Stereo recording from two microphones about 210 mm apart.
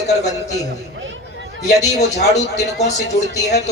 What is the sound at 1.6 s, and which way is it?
A man's voice, 35° left (ahead or behind).